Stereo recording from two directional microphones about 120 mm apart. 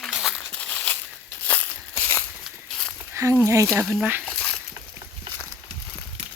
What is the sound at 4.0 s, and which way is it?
Speech, 15° right (ahead or behind).